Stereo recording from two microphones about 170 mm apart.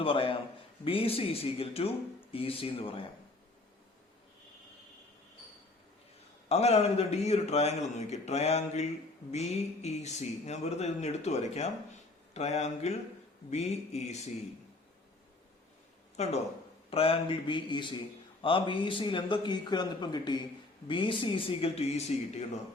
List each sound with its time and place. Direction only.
0.0 s a man's voice: 30° left (ahead or behind)
6.5 s a man's voice: 40° left (ahead or behind)
16.1 s a man's voice: 40° left (ahead or behind)